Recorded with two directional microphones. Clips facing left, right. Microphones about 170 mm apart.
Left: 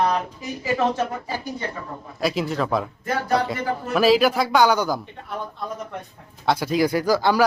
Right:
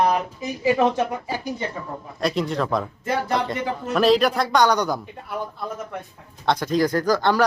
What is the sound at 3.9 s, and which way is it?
Speech, 5° left (ahead or behind).